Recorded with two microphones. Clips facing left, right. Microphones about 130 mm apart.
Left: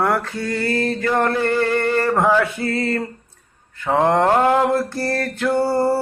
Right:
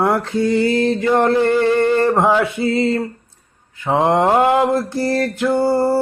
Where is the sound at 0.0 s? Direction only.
20° right (ahead or behind).